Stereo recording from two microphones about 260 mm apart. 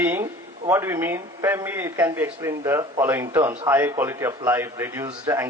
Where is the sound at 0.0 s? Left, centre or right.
Centre.